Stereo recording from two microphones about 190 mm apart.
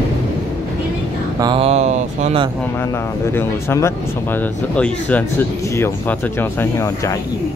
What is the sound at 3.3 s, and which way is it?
Speech, 10° left (ahead or behind).